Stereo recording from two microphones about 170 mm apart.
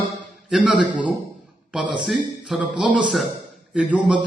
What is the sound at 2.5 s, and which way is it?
A man's voice, 5° right (ahead or behind).